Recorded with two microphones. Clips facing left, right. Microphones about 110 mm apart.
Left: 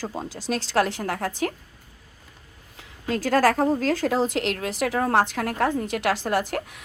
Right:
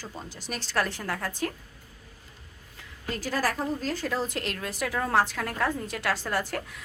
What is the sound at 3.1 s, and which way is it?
Speech, 65° left (ahead or behind).